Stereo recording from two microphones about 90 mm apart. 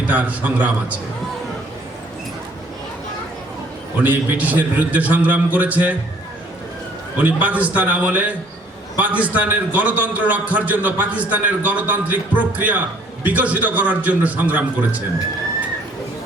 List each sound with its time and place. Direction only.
0.1 s a man's voice: 20° right (ahead or behind)
4.0 s a man's voice: 20° right (ahead or behind)
7.2 s a man's voice: 15° right (ahead or behind)